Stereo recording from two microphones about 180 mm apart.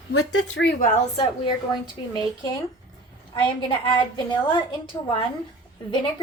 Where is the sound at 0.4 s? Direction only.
80° left.